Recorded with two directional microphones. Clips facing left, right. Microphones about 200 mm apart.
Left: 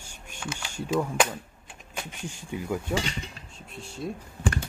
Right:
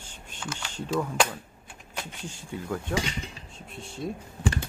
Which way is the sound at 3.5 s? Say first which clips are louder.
Left 1 dB; centre (ahead or behind).